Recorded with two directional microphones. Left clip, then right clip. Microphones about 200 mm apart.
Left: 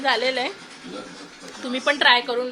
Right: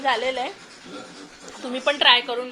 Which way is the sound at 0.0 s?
10° left (ahead or behind).